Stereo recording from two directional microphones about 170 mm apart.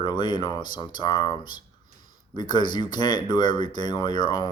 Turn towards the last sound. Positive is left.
turn(degrees=25)  # may be behind; listen again after turning